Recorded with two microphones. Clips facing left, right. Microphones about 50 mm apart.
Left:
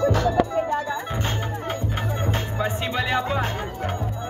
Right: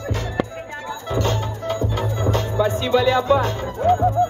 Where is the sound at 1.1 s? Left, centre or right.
Left.